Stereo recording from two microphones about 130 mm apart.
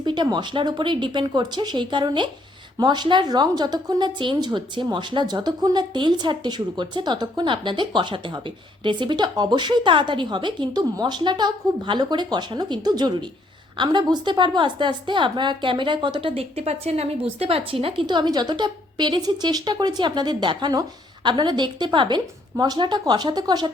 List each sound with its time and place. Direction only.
0.0 s a woman's voice: 35° right (ahead or behind)